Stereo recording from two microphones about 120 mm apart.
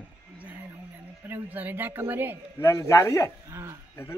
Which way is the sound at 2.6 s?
25° left (ahead or behind).